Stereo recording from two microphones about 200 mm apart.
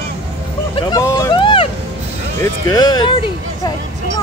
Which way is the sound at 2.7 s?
20° left (ahead or behind).